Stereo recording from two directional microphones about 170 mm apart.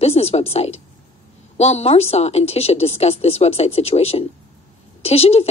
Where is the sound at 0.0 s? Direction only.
35° left (ahead or behind).